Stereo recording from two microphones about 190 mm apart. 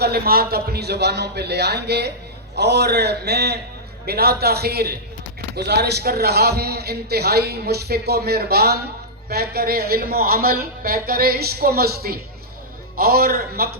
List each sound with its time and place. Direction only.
0.0 s a man's voice: 55° right (ahead or behind)